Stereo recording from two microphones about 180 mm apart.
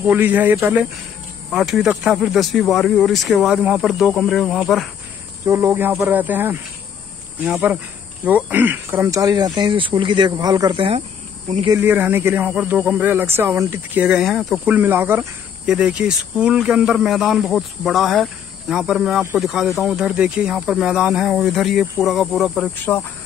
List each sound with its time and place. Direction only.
0.0 s speech: 10° right (ahead or behind)
5.4 s speech: 15° right (ahead or behind)
11.6 s speech: 15° right (ahead or behind); by 23.0 s 10° left (ahead or behind)